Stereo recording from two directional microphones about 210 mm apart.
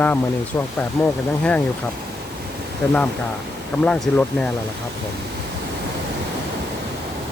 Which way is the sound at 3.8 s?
5° left (ahead or behind).